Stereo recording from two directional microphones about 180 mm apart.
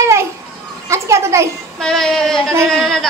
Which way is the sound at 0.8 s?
15° right (ahead or behind).